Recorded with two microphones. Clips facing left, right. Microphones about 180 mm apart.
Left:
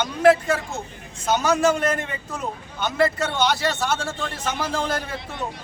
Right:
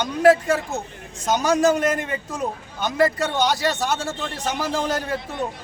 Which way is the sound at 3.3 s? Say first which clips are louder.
Right 1 dB; 40° right (ahead or behind).